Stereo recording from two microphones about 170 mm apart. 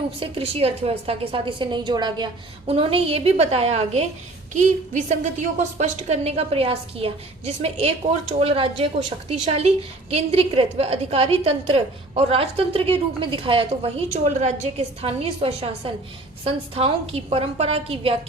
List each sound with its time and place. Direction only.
0.2 s a woman's voice: 35° right (ahead or behind)